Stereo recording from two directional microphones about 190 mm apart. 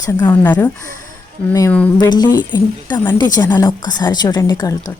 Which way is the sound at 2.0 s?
20° left (ahead or behind).